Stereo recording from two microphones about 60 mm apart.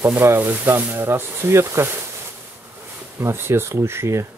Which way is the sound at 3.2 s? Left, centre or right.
Right.